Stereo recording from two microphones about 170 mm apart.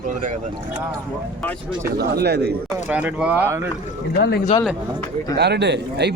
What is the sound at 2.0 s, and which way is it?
Speech, 70° right (ahead or behind).